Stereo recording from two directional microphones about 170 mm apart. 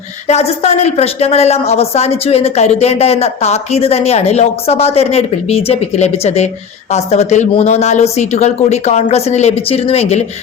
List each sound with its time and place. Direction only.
0.3 s a woman's voice: 40° left (ahead or behind)